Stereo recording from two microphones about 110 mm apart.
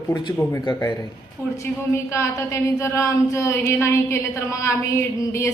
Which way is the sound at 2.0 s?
25° left (ahead or behind).